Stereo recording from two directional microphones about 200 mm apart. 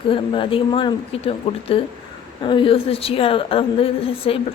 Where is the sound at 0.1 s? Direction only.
25° left (ahead or behind).